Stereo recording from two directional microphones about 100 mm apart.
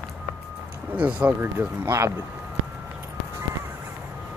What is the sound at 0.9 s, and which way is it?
Speech, 10° right (ahead or behind).